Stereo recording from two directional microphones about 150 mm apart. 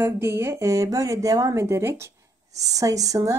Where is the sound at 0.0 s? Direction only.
15° right (ahead or behind).